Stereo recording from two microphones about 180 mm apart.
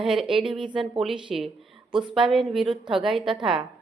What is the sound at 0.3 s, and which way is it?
Speech, 30° right (ahead or behind).